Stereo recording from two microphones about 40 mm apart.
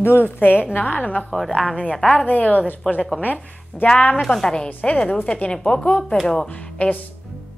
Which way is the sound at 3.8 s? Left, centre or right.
Left.